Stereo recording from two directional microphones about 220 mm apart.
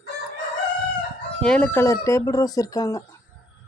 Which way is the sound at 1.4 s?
5° left (ahead or behind).